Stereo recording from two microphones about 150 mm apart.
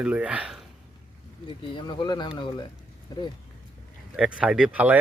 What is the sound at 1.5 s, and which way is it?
Speech, 35° left (ahead or behind).